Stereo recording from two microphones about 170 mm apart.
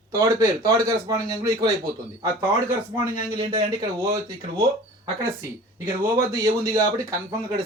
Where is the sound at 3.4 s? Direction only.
25° right (ahead or behind).